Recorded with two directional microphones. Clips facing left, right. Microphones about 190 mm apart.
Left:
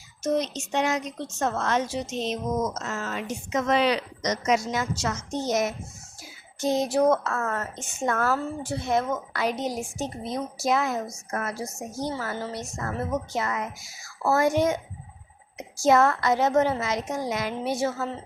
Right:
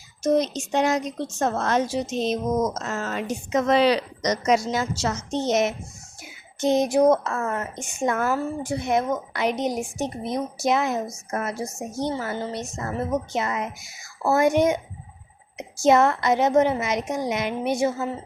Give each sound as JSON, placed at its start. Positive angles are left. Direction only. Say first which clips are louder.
{"t": 0.2, "sound": "a woman's voice", "louder": "right 4 dB", "side_deg": -35}
{"t": 11.5, "sound": "a woman's voice", "louder": "right 3 dB", "side_deg": 0}
{"t": 12.0, "sound": "a woman's voice", "louder": "right 3 dB", "side_deg": -25}